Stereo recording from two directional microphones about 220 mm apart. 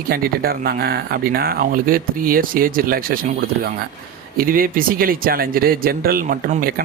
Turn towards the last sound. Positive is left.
turn(degrees=-40)  # may be behind; listen again after turning